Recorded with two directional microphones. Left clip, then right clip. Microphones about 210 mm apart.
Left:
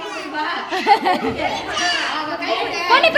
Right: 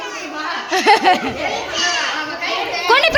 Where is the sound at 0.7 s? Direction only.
15° right (ahead or behind).